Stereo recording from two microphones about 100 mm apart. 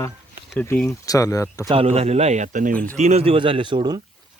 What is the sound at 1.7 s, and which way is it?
Speech, 90° right.